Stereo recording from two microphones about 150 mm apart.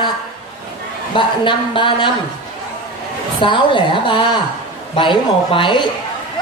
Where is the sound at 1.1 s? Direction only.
35° left (ahead or behind).